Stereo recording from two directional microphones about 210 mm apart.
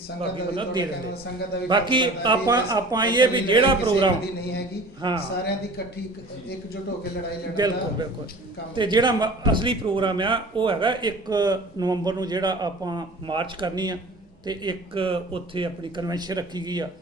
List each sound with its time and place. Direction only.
0.2 s a man's voice: 20° right (ahead or behind)
7.5 s a man's voice: 20° right (ahead or behind)